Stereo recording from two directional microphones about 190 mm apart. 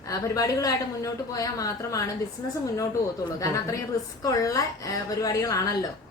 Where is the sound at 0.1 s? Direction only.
20° left (ahead or behind).